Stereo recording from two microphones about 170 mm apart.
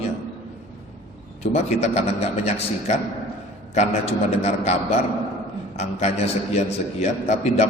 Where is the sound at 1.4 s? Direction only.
40° left (ahead or behind).